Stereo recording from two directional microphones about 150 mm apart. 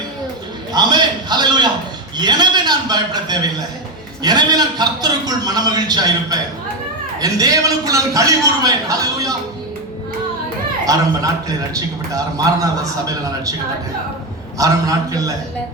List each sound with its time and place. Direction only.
0.7 s a sound: 30° right (ahead or behind)
2.1 s a man's voice: 30° right (ahead or behind)
7.2 s a man's voice: 25° right (ahead or behind)
10.8 s a man's voice: 25° right (ahead or behind)
14.6 s a man's voice: 25° right (ahead or behind)